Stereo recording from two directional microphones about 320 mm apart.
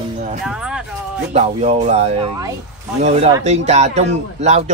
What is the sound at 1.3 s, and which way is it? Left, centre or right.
Speech, right.